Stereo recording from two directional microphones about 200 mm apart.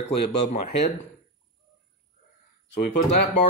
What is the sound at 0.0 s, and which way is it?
Speech, 35° left (ahead or behind).